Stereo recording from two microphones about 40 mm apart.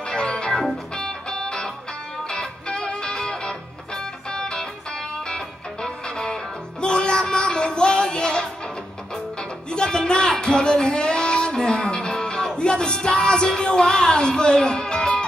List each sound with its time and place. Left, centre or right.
0.0 s music: left